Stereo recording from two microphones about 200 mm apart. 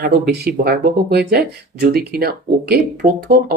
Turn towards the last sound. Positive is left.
turn(degrees=-50)  # may be behind; listen again after turning